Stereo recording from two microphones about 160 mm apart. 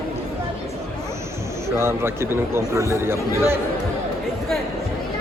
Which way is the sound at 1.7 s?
15° right (ahead or behind).